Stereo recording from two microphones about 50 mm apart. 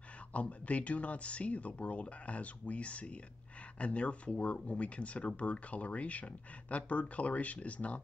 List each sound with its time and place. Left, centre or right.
0.3 s speech: left